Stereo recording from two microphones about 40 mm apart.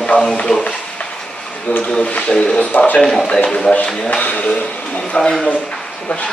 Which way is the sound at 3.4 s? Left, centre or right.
Left.